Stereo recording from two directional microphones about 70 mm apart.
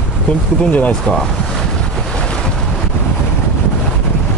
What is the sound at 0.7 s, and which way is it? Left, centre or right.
Speech, left.